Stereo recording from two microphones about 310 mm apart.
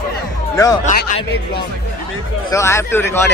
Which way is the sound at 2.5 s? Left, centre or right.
Centre.